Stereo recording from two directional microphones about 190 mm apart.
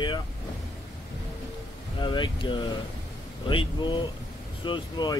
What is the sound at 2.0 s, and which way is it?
Speech, 25° left (ahead or behind).